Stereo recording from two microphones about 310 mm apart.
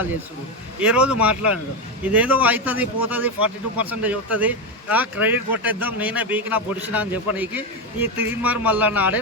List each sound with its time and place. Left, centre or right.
0.8 s a man's voice: centre